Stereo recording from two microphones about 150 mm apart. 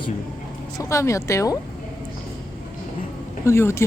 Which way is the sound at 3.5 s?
15° left (ahead or behind).